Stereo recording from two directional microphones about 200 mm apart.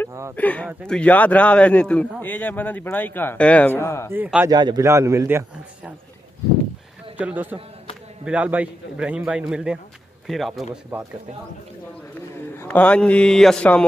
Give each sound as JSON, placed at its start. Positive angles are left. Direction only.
{"t": 0.4, "sound": "a man's voice", "side_deg": 10}
{"t": 4.1, "sound": "a man's voice", "side_deg": -10}
{"t": 4.5, "sound": "a man's voice", "side_deg": -20}
{"t": 7.2, "sound": "a man's voice", "side_deg": -10}
{"t": 12.5, "sound": "a man's voice", "side_deg": 5}